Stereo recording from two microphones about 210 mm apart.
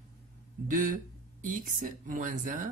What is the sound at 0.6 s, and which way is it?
Speech, 40° right (ahead or behind).